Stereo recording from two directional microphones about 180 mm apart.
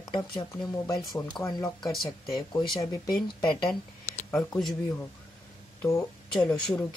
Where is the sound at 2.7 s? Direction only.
20° left (ahead or behind).